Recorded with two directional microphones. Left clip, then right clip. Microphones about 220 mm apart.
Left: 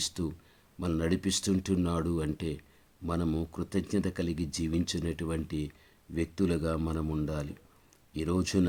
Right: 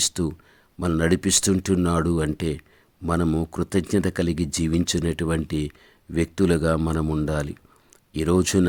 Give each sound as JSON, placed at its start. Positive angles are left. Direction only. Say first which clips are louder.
{"t": 0.0, "sound": "speech", "louder": "right 10 dB", "side_deg": -35}